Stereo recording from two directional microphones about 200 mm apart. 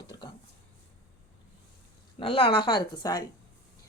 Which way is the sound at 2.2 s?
25° left (ahead or behind).